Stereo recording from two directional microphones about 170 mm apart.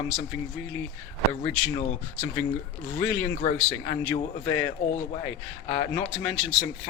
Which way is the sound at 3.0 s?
15° left (ahead or behind).